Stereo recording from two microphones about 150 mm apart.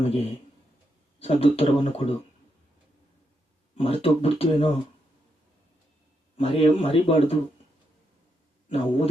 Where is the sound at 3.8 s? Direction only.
40° left (ahead or behind).